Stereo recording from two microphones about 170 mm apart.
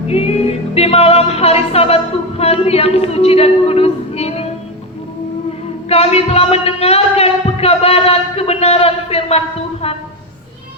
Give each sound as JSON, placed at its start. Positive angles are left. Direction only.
{"t": 0.1, "sound": "music", "side_deg": 35}
{"t": 2.4, "sound": "a woman's voice", "side_deg": 35}
{"t": 5.9, "sound": "speech", "side_deg": 35}